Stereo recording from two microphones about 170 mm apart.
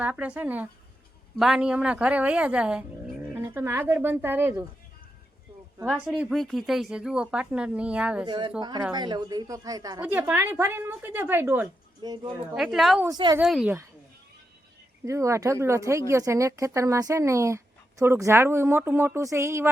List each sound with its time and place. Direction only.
0.0 s speech: 10° right (ahead or behind)
5.8 s speech: 5° right (ahead or behind)
8.2 s speech: 25° right (ahead or behind)
10.0 s speech: 10° right (ahead or behind)
12.0 s speech: 25° right (ahead or behind)
12.5 s speech: centre (ahead or behind)
13.1 s speech: 20° right (ahead or behind)
13.4 s speech: 5° right (ahead or behind)
15.0 s speech: 15° right (ahead or behind)